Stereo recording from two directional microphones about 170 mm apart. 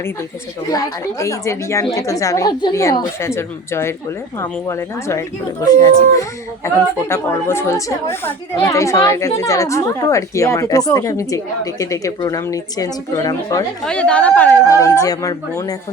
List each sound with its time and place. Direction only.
1.2 s a woman's voice: 15° left (ahead or behind)
13.8 s a woman's voice: 5° left (ahead or behind)